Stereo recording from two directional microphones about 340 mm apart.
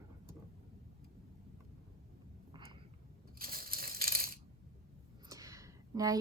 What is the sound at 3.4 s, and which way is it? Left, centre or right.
Crushing, right.